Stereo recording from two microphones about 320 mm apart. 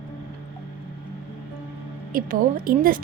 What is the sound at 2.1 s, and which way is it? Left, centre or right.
Speech, right.